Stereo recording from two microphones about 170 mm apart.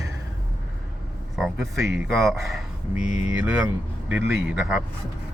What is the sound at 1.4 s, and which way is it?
Speech, centre (ahead or behind).